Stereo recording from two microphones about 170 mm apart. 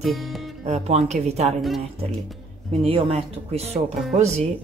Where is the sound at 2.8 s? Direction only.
35° right (ahead or behind).